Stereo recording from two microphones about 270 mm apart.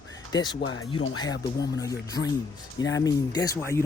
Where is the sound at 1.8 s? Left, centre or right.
Centre.